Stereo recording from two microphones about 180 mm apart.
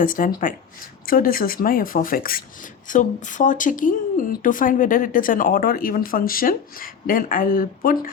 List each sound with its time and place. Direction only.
0.0 s speech: 50° left (ahead or behind)